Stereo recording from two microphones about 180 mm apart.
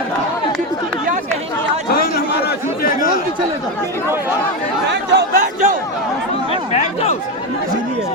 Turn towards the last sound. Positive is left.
turn(degrees=40)  # may be behind; listen again after turning